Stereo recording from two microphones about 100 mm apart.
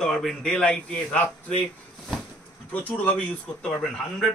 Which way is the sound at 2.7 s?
15° left (ahead or behind).